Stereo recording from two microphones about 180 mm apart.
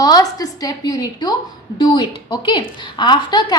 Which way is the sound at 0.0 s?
20° left (ahead or behind).